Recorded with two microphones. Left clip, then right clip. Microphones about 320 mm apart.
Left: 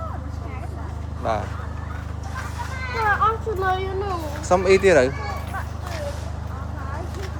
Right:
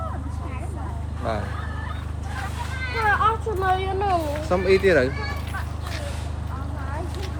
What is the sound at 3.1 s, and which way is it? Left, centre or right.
Vehicle, right.